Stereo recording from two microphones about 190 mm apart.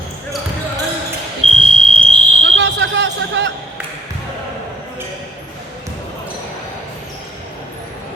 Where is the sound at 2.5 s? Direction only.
70° right (ahead or behind).